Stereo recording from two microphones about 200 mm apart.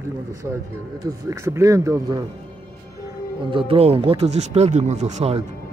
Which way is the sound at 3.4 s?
25° right (ahead or behind).